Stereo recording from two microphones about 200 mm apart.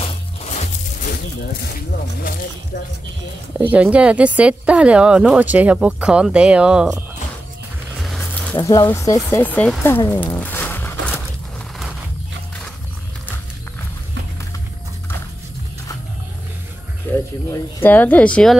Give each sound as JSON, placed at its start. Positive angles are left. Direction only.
{"t": 0.0, "sound": "music", "side_deg": 35}
{"t": 3.5, "sound": "speech", "side_deg": -5}
{"t": 8.0, "sound": "music", "side_deg": 0}
{"t": 8.5, "sound": "speech", "side_deg": 20}
{"t": 9.8, "sound": "a sound", "side_deg": 10}
{"t": 17.1, "sound": "music", "side_deg": 10}
{"t": 17.5, "sound": "speech", "side_deg": 10}